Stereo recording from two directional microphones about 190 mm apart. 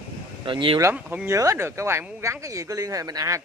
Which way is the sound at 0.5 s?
25° right (ahead or behind).